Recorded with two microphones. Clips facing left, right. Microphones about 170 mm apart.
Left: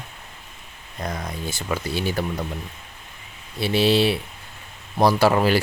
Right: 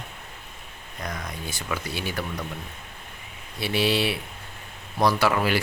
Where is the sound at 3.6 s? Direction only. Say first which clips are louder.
Left 5 dB; 30° left (ahead or behind).